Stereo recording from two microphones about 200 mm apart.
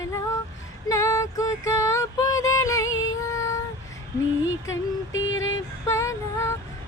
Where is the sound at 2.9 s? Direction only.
80° left.